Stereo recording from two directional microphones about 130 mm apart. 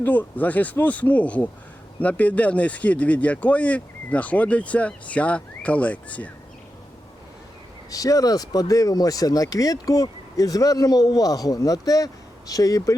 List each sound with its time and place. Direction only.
0.0 s speech: 15° left (ahead or behind)
7.9 s speech: 25° left (ahead or behind)